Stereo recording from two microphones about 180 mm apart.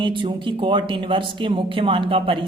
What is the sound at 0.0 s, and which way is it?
Speech, 25° right (ahead or behind).